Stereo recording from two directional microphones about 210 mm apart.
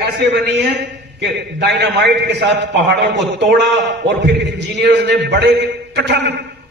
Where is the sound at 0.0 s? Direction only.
55° right (ahead or behind).